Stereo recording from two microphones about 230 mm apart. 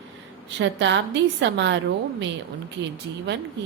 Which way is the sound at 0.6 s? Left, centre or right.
Right.